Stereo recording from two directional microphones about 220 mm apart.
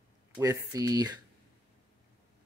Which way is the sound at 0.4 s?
15° right (ahead or behind).